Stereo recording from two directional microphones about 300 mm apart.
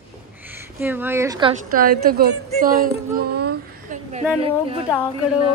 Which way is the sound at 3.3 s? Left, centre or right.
Right.